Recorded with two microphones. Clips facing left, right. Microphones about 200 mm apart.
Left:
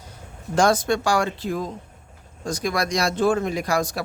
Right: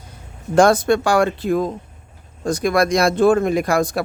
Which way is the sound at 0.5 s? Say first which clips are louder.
Right 6 dB; 55° right (ahead or behind).